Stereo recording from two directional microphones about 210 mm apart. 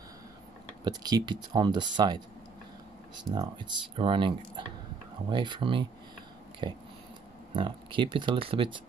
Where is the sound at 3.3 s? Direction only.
20° right (ahead or behind).